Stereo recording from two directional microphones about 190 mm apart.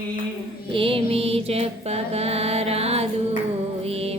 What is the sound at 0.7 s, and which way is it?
Mantra, 30° right (ahead or behind).